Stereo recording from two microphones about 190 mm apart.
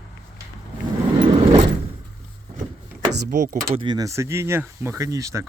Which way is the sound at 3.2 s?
45° right (ahead or behind).